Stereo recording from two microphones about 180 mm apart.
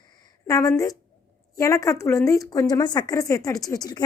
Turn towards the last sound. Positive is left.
turn(degrees=20)  # may be behind; listen again after turning